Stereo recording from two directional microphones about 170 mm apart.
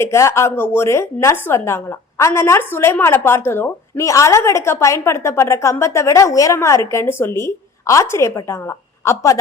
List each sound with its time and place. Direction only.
0.0 s a woman's voice: 15° left (ahead or behind)